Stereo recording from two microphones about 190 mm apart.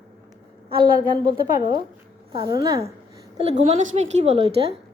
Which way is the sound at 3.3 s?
35° right (ahead or behind).